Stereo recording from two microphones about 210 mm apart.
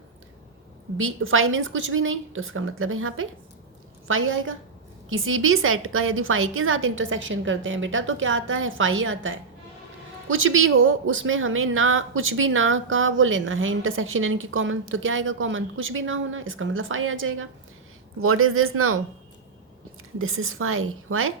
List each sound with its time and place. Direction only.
0.9 s speech: 75° right (ahead or behind)
18.2 s speech: 85° right
20.1 s speech: 75° right (ahead or behind)